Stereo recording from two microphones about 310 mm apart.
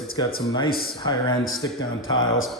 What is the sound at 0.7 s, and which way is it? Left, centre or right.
Speech, left.